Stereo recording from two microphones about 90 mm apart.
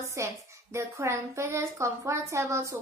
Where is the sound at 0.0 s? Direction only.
35° right (ahead or behind).